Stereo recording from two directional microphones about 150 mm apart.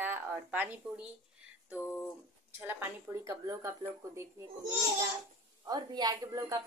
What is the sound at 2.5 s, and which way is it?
A woman's voice, 15° right (ahead or behind).